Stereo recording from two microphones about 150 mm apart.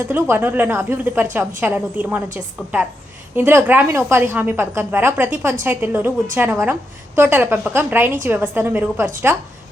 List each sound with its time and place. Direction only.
0.1 s a woman's voice: 15° right (ahead or behind)
3.3 s a woman's voice: 15° right (ahead or behind)